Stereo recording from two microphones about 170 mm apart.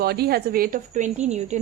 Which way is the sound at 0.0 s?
65° right (ahead or behind).